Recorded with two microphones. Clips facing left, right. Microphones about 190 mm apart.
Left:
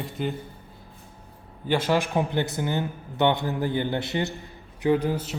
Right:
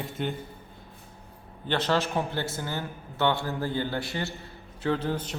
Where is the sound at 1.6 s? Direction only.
10° left (ahead or behind).